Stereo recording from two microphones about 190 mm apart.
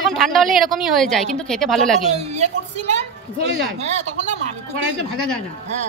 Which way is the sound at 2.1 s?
35° right (ahead or behind).